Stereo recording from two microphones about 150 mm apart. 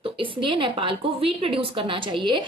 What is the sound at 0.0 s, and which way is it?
A woman's voice, 35° right (ahead or behind).